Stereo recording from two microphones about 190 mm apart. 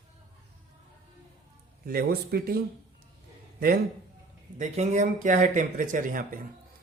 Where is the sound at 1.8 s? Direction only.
50° right (ahead or behind).